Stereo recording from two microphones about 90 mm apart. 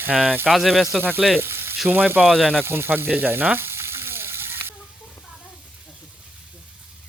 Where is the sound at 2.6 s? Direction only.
25° right (ahead or behind).